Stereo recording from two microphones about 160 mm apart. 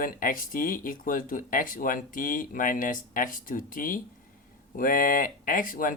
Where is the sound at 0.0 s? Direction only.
60° left (ahead or behind).